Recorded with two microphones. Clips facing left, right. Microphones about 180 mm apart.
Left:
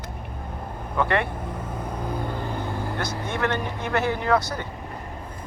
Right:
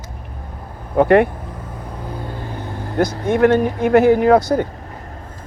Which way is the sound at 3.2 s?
55° right (ahead or behind).